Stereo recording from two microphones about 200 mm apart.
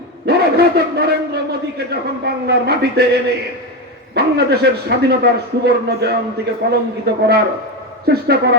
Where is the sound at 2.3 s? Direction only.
55° right (ahead or behind).